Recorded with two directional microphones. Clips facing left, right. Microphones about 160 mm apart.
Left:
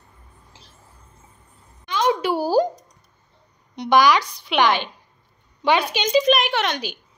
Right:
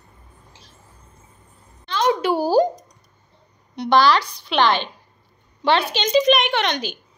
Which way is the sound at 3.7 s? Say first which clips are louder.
Even; 15° left (ahead or behind).